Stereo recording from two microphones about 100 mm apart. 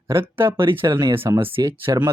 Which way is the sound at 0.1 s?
25° right (ahead or behind).